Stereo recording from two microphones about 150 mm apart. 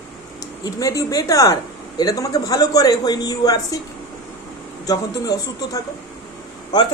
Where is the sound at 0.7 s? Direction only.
25° left (ahead or behind).